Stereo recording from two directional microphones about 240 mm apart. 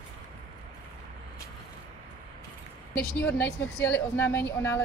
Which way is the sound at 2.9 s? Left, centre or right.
Centre.